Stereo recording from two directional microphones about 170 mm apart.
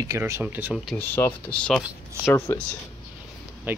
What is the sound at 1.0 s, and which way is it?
Speech, 10° left (ahead or behind).